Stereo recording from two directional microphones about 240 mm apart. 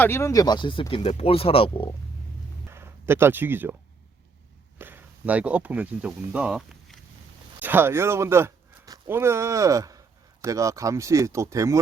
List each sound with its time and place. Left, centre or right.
0.0 s speech: centre
2.6 s speech: centre
4.8 s speech: centre